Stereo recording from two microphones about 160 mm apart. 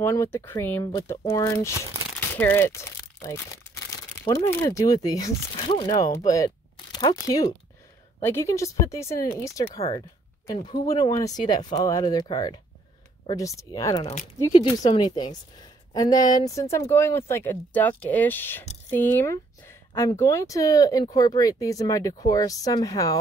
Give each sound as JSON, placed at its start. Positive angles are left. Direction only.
{"t": 0.0, "sound": "speech", "side_deg": 15}
{"t": 3.9, "sound": "crumpling", "side_deg": 20}
{"t": 4.6, "sound": "speech", "side_deg": 20}
{"t": 5.9, "sound": "speech", "side_deg": 20}
{"t": 14.5, "sound": "speech", "side_deg": 30}